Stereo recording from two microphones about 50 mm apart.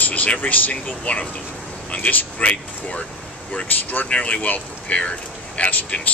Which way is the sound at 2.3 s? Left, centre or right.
Left.